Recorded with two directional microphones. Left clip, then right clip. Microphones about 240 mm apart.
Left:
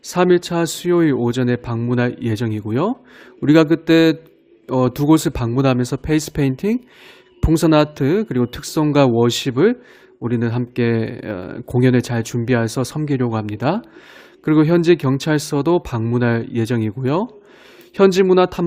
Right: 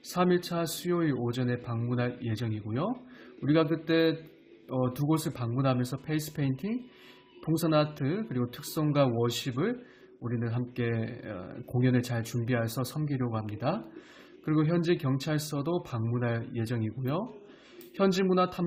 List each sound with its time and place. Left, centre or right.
0.0 s speech: left